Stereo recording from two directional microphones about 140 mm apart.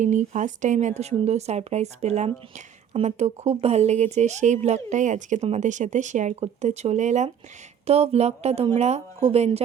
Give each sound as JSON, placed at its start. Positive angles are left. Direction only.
{"t": 0.0, "sound": "a woman's voice", "side_deg": -60}